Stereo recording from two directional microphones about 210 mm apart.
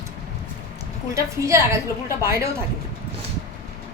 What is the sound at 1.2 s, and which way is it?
Speech, 15° right (ahead or behind).